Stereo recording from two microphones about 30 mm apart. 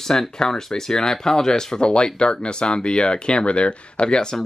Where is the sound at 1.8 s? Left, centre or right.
Left.